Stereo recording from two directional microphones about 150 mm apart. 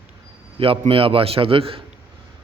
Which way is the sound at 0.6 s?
35° right (ahead or behind).